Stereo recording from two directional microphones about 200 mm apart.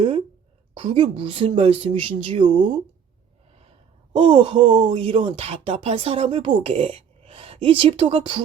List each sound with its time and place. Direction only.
0.7 s speech: 25° right (ahead or behind)